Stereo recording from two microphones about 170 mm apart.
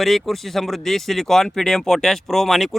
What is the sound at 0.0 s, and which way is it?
Speech, centre (ahead or behind).